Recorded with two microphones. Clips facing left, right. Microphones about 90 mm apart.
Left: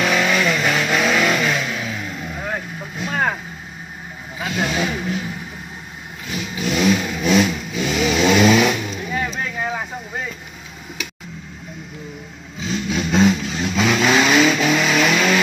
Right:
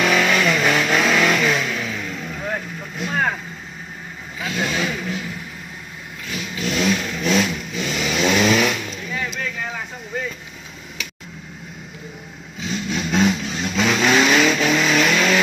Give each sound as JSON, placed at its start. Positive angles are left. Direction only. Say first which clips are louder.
{"t": 0.0, "sound": "vehicle", "louder": "even", "side_deg": 5}
{"t": 4.5, "sound": "vehicle", "louder": "left 2 dB", "side_deg": 20}
{"t": 6.3, "sound": "vehicle", "louder": "left 2 dB", "side_deg": 15}
{"t": 9.1, "sound": "vehicle", "louder": "left 2 dB", "side_deg": 30}
{"t": 12.6, "sound": "vehicle", "louder": "left 2 dB", "side_deg": 0}